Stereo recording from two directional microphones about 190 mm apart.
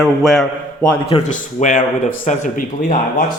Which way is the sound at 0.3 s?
5° left (ahead or behind).